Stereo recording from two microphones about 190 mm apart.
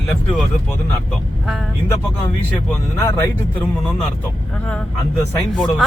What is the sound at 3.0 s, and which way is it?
Speech, 15° left (ahead or behind).